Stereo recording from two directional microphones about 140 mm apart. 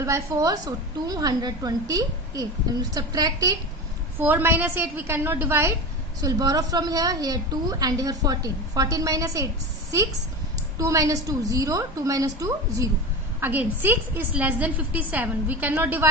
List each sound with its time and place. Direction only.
0.0 s a woman's voice: 20° right (ahead or behind)
4.2 s a woman's voice: 15° right (ahead or behind)
10.8 s a woman's voice: 25° right (ahead or behind)